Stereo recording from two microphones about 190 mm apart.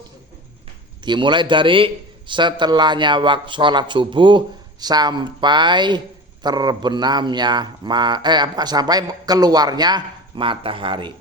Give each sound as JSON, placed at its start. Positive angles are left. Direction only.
{"t": 1.0, "sound": "a man's voice", "side_deg": -25}